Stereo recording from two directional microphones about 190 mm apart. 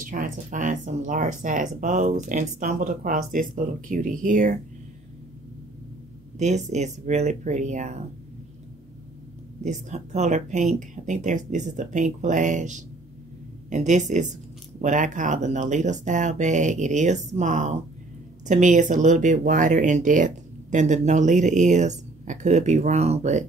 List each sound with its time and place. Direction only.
0.0 s speech: 45° right (ahead or behind)
6.3 s speech: 35° right (ahead or behind)
9.6 s speech: 40° right (ahead or behind)